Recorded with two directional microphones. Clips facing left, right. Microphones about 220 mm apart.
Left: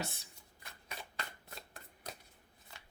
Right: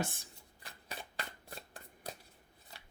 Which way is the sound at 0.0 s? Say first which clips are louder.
Right 4 dB; 50° right (ahead or behind).